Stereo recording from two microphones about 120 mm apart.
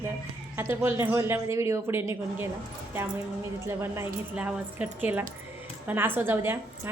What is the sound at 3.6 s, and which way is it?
A woman's voice, 20° right (ahead or behind).